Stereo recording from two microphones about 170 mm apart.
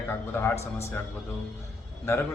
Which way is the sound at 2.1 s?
15° left (ahead or behind).